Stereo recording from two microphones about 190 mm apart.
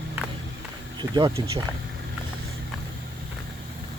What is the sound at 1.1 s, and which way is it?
Speech, 25° right (ahead or behind).